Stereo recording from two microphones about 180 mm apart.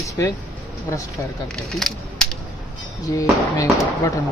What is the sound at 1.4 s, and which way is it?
Speech, centre (ahead or behind).